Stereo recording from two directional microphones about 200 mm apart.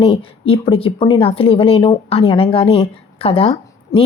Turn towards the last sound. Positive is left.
turn(degrees=30)  # may be behind; listen again after turning